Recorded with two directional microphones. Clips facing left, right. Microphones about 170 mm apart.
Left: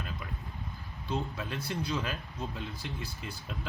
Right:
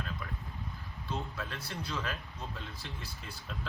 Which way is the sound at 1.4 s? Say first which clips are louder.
Left 5 dB; 15° left (ahead or behind).